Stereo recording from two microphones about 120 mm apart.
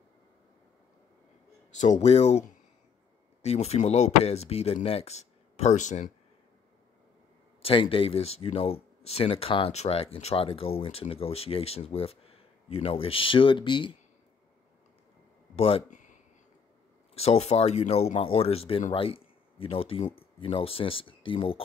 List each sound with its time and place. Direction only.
1.8 s speech: 75° left (ahead or behind)
3.4 s speech: 60° left (ahead or behind); by 6.0 s 80° left
7.6 s speech: 50° left (ahead or behind)
15.5 s speech: 50° left (ahead or behind)
17.1 s speech: 60° left (ahead or behind)